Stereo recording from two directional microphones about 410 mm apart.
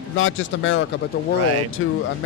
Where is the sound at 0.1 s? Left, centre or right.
Left.